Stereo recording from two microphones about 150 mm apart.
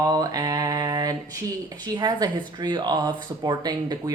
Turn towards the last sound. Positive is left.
turn(degrees=-25)  # may be behind; listen again after turning